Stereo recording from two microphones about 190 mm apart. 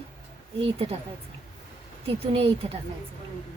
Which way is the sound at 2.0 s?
30° right (ahead or behind).